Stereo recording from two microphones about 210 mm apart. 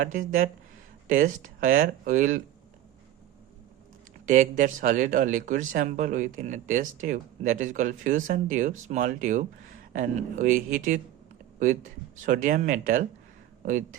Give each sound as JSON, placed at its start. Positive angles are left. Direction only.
{"t": 0.0, "sound": "speech", "side_deg": -40}
{"t": 4.3, "sound": "speech", "side_deg": -35}
{"t": 12.2, "sound": "speech", "side_deg": -40}